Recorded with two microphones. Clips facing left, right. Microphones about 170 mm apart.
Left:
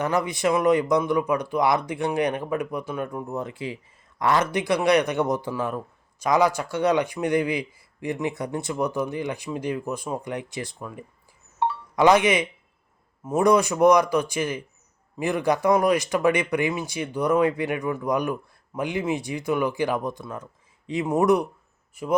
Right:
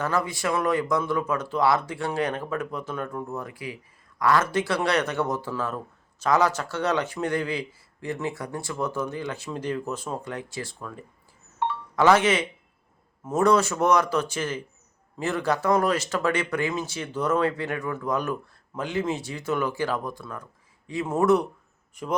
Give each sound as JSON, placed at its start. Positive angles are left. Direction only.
{"t": 0.0, "sound": "speech", "side_deg": 20}
{"t": 11.6, "sound": "a sound", "side_deg": 30}
{"t": 11.9, "sound": "speech", "side_deg": 15}